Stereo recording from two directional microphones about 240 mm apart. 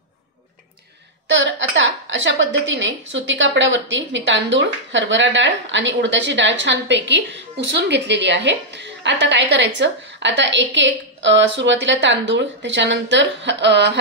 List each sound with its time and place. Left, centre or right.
1.4 s a woman's voice: right